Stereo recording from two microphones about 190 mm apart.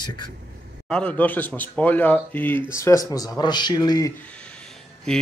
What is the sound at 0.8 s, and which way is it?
A man's voice, 5° left (ahead or behind).